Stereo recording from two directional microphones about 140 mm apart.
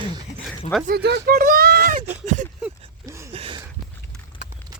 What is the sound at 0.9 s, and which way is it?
Speech, 90° right.